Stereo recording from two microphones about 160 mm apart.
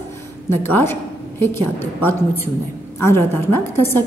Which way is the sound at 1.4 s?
15° left (ahead or behind).